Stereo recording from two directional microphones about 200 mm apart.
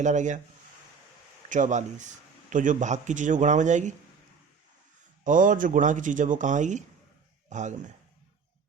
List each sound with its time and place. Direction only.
0.0 s speech: 35° right (ahead or behind)
1.5 s speech: 40° right (ahead or behind)
5.2 s speech: 40° right (ahead or behind)